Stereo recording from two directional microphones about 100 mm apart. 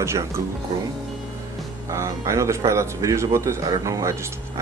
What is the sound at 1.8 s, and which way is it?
Speech, 30° right (ahead or behind).